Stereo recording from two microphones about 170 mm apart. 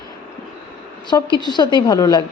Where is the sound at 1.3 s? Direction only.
25° left (ahead or behind).